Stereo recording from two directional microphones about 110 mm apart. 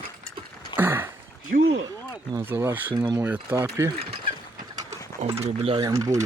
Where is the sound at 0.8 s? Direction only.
20° right (ahead or behind).